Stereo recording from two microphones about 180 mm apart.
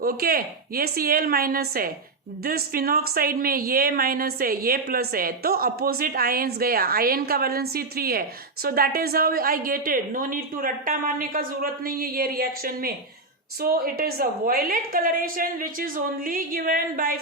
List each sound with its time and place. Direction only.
0.0 s a woman's voice: 55° right (ahead or behind)